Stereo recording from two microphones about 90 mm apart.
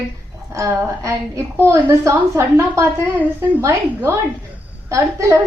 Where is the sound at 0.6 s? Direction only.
35° right (ahead or behind).